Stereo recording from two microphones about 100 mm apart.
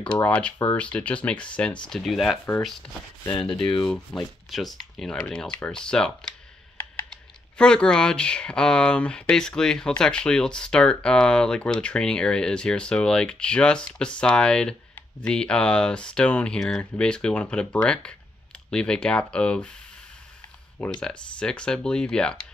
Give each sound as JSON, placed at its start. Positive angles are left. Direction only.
{"t": 0.2, "sound": "speech", "side_deg": 15}
{"t": 3.3, "sound": "speech", "side_deg": 55}
{"t": 4.1, "sound": "speech", "side_deg": 10}
{"t": 7.5, "sound": "speech", "side_deg": 10}
{"t": 20.8, "sound": "speech", "side_deg": 10}